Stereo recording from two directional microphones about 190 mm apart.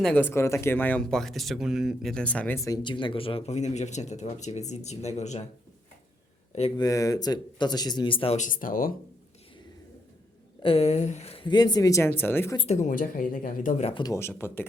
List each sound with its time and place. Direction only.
0.0 s speech: 10° left (ahead or behind)
2.6 s speech: 20° left (ahead or behind)
6.7 s speech: 20° left (ahead or behind)
8.4 s speech: 45° left (ahead or behind)
10.6 s speech: 30° left (ahead or behind); by 12.5 s 10° left (ahead or behind)
12.5 s speech: 35° left (ahead or behind)
14.0 s speech: 15° left (ahead or behind)